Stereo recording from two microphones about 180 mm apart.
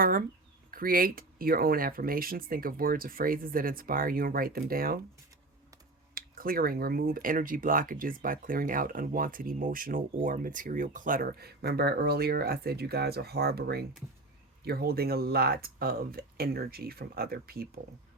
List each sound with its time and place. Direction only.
0.0 s speech: 50° right (ahead or behind)
6.1 s speech: 55° right (ahead or behind)